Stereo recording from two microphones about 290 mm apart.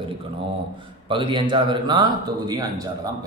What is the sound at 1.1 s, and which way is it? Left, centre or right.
A man's voice, centre.